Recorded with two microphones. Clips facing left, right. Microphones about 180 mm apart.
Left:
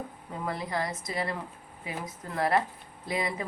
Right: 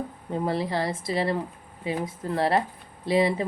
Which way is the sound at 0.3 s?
30° right (ahead or behind).